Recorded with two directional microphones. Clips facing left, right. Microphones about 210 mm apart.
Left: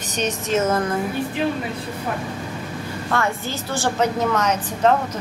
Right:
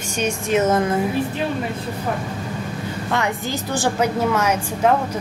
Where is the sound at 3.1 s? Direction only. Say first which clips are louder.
Even; 15° right (ahead or behind).